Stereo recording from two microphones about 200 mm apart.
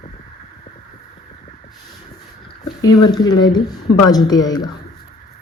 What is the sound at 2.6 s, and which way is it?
A woman's voice, 20° left (ahead or behind).